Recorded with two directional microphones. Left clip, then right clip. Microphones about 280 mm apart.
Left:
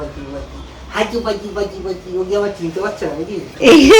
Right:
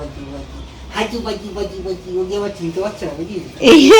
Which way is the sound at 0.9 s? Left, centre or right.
Centre.